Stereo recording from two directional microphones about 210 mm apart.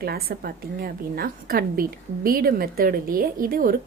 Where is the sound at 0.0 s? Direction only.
45° right (ahead or behind).